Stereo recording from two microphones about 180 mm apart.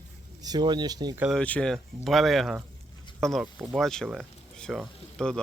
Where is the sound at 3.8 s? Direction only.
Centre (ahead or behind).